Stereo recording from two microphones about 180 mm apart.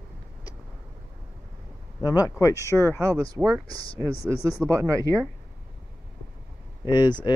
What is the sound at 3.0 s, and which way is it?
Speech, 15° right (ahead or behind).